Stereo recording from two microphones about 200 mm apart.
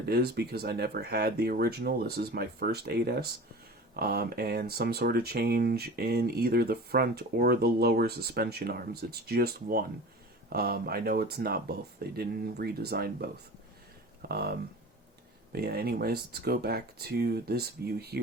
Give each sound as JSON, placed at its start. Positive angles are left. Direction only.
{"t": 0.0, "sound": "speech", "side_deg": -55}
{"t": 15.5, "sound": "speech", "side_deg": -50}